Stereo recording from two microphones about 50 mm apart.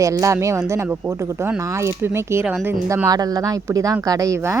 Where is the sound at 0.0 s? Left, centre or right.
Right.